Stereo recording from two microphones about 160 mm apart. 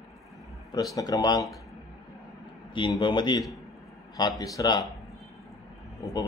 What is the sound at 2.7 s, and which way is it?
Speech, 25° left (ahead or behind).